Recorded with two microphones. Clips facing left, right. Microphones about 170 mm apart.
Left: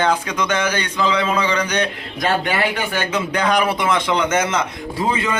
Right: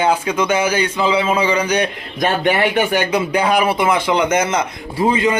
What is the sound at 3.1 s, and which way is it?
A man's voice, 10° right (ahead or behind).